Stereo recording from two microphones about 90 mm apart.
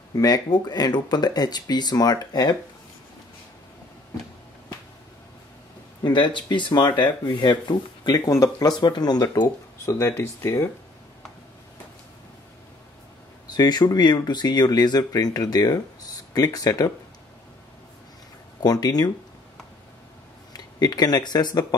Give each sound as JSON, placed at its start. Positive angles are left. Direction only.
{"t": 0.1, "sound": "speech", "side_deg": 45}
{"t": 6.0, "sound": "speech", "side_deg": 60}
{"t": 8.3, "sound": "speech", "side_deg": 45}
{"t": 9.8, "sound": "speech", "side_deg": 30}
{"t": 13.5, "sound": "speech", "side_deg": 50}
{"t": 18.6, "sound": "speech", "side_deg": 45}
{"t": 20.5, "sound": "speech", "side_deg": 50}